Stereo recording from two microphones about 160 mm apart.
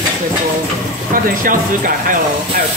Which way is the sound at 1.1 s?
60° right (ahead or behind).